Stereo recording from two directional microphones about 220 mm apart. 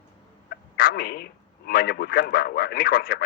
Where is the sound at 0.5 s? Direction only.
40° left (ahead or behind).